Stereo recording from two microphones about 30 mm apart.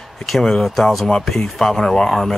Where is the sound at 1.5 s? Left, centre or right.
Centre.